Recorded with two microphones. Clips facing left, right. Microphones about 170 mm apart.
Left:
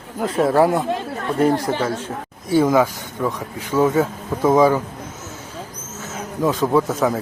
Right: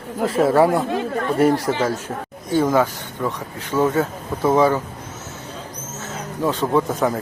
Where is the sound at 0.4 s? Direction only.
Centre (ahead or behind).